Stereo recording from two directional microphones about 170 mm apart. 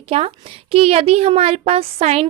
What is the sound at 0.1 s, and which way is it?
A child's voice, 35° right (ahead or behind).